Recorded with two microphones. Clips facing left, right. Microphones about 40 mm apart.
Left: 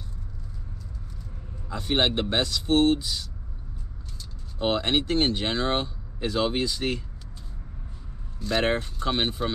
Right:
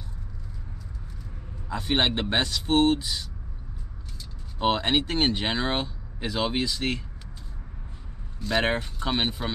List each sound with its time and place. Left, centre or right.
1.7 s speech: centre
4.6 s speech: centre
8.4 s speech: centre